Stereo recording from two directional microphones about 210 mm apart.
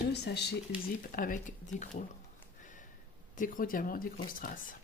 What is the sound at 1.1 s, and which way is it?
Speech, 40° left (ahead or behind).